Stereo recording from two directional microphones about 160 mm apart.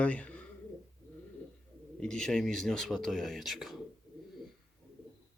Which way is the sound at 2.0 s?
5° left (ahead or behind).